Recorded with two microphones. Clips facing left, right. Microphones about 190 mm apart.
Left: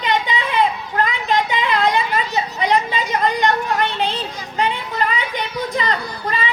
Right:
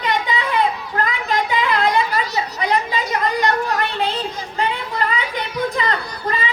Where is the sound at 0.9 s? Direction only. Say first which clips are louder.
Left 2 dB; 20° left (ahead or behind).